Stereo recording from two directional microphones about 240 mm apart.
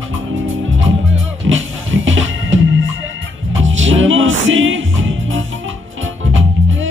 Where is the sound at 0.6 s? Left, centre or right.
Right.